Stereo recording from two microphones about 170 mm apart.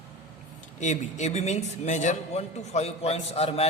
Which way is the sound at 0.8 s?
45° left (ahead or behind).